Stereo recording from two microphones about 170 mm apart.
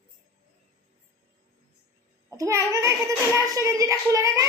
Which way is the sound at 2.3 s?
20° right (ahead or behind).